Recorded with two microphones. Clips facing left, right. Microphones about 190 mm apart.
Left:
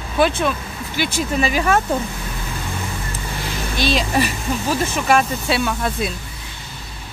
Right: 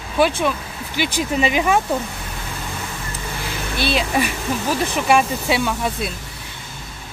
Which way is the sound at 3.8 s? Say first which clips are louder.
Left 1 dB; 10° right (ahead or behind).